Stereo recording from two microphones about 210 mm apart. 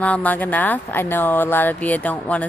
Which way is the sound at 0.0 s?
5° left (ahead or behind).